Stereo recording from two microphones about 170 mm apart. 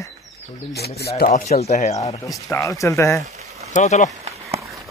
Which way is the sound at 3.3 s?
40° right (ahead or behind).